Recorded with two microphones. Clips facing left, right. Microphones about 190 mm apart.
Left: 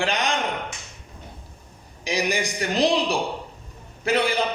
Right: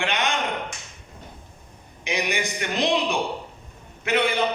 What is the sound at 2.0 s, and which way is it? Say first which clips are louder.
Speech: left 2 dB; 35° left (ahead or behind).